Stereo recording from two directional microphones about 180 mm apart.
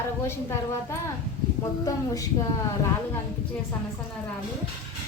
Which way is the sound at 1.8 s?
20° left (ahead or behind).